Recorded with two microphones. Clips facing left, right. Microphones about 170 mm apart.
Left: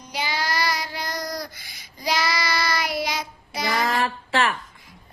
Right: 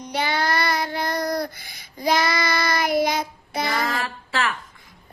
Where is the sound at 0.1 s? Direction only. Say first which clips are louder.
Right 4 dB; 60° right (ahead or behind).